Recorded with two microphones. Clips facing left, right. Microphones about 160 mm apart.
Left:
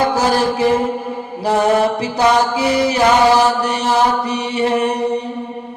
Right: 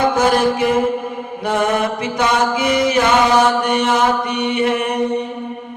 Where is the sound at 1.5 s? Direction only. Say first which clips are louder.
Left 4 dB; 30° left (ahead or behind).